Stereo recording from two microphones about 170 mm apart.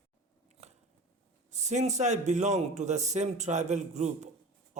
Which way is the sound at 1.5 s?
45° right (ahead or behind).